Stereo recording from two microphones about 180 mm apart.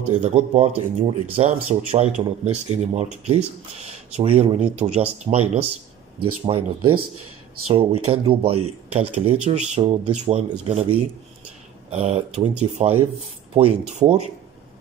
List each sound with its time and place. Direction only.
0.2 s speech: 40° right (ahead or behind)